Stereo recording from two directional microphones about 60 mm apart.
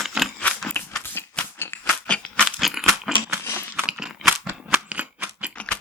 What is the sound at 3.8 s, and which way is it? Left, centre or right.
Crunch, centre.